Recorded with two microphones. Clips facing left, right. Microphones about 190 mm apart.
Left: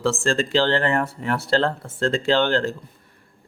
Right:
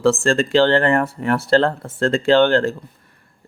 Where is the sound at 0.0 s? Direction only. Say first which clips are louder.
Right 5 dB; 55° right (ahead or behind).